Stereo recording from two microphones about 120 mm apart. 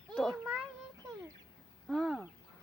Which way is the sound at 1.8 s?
Centre (ahead or behind).